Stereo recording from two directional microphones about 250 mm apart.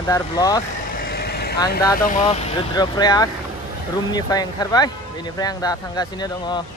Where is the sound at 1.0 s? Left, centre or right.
Left.